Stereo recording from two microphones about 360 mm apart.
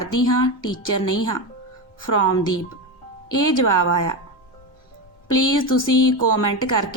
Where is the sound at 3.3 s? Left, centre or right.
Left.